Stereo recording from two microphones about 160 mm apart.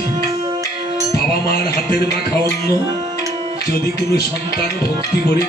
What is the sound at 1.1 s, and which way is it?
Music, 70° left (ahead or behind).